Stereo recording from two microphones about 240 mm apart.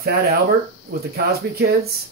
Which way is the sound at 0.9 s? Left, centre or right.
Right.